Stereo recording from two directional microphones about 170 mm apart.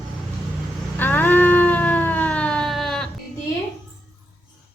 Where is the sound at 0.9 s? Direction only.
10° left (ahead or behind).